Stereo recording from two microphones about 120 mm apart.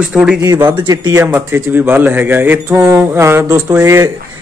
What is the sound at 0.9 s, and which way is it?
Speech, 30° right (ahead or behind).